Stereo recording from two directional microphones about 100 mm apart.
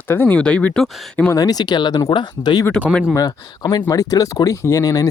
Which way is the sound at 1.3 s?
40° left (ahead or behind).